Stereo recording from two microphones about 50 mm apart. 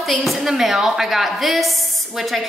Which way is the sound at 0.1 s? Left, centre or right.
Centre.